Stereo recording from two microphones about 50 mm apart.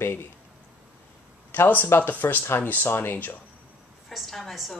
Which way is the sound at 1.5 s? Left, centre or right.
Left.